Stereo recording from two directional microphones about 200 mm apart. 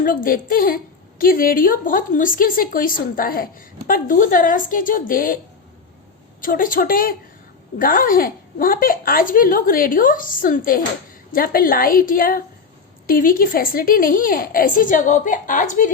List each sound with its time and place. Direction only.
0.0 s a woman's voice: 45° left (ahead or behind)
6.4 s a woman's voice: 45° left (ahead or behind)